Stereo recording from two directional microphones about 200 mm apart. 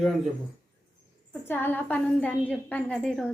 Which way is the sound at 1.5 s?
10° left (ahead or behind).